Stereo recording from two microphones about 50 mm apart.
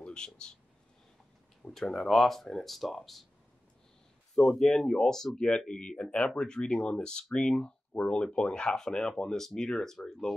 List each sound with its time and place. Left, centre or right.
0.0 s speech: centre
1.6 s speech: centre
4.4 s speech: centre
5.7 s speech: left